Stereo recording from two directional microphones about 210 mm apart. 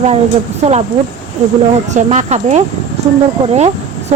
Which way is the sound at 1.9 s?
35° right (ahead or behind).